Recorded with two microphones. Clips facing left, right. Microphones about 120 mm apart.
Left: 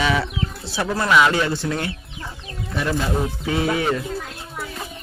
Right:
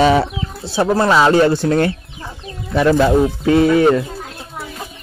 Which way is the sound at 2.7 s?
80° right.